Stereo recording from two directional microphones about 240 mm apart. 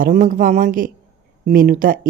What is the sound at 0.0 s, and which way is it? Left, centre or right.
Speech, right.